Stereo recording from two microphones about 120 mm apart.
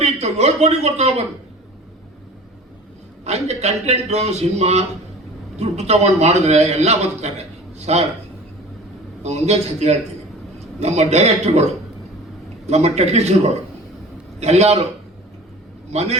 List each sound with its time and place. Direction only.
0.0 s speech: 65° right (ahead or behind)
3.2 s a man's voice: 65° right (ahead or behind)
9.2 s a man's voice: 65° right (ahead or behind)
12.6 s a man's voice: 65° right (ahead or behind)
14.3 s a man's voice: 65° right (ahead or behind)
15.9 s a man's voice: 65° right (ahead or behind)